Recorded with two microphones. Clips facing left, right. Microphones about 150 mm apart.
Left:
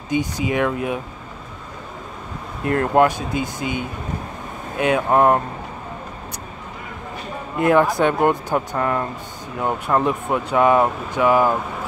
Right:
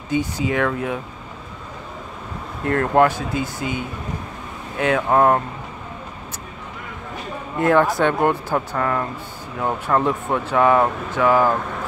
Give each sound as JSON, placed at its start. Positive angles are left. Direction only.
{"t": 0.1, "sound": "speech", "side_deg": 15}
{"t": 2.6, "sound": "speech", "side_deg": 20}
{"t": 7.5, "sound": "speech", "side_deg": 15}